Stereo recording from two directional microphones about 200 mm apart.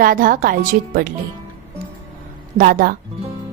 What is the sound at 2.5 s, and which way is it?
Speech, 45° right (ahead or behind).